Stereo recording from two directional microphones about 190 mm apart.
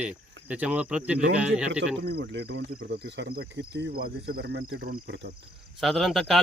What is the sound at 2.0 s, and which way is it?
Speech, 60° right (ahead or behind).